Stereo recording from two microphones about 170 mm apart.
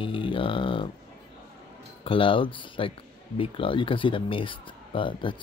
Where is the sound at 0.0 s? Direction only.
30° left (ahead or behind).